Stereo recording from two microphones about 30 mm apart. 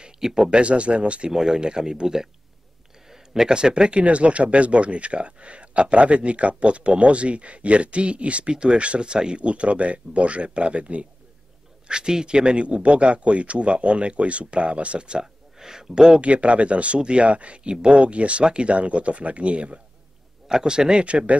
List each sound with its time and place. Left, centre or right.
0.5 s speech: right
1.3 s speech: right
3.1 s a sound: centre
3.5 s speech: right
4.0 s speech: right
9.1 s speech: right
9.4 s speech: right
11.9 s speech: right
15.6 s speech: centre
16.2 s speech: right
20.6 s speech: right
21.0 s speech: right